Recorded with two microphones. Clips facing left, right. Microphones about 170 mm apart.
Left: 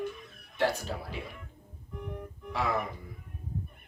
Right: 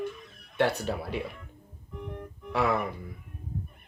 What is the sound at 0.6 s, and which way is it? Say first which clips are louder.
Speech: right 3 dB; 65° right (ahead or behind).